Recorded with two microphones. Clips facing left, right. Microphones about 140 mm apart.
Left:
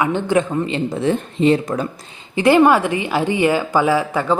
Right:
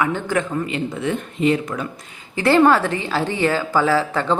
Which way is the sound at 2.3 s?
15° left (ahead or behind).